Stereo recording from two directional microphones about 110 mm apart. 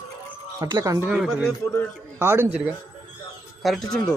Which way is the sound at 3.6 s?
Centre (ahead or behind).